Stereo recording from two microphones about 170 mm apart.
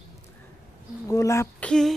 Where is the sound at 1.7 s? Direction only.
5° left (ahead or behind).